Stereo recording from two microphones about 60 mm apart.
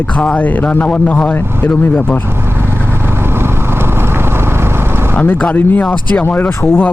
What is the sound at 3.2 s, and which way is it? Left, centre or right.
Vehicle, right.